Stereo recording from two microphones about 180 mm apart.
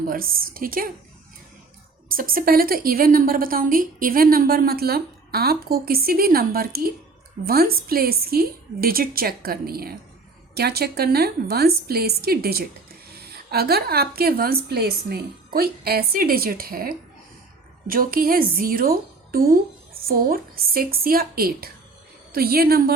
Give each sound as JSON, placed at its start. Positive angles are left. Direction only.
{"t": 0.1, "sound": "a woman's voice", "side_deg": -55}
{"t": 2.0, "sound": "a woman's voice", "side_deg": -50}